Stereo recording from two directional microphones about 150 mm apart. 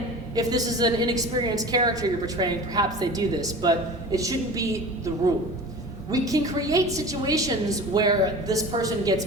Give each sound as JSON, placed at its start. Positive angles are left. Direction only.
{"t": 0.3, "sound": "a woman's voice", "side_deg": -25}